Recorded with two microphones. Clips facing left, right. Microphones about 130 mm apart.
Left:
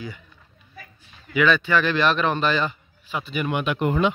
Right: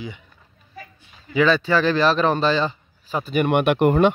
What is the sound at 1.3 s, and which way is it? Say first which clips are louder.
A man's voice: right 2 dB; 30° right (ahead or behind).